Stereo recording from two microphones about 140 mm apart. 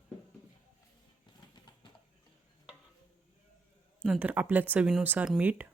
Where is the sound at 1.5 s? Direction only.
30° left (ahead or behind).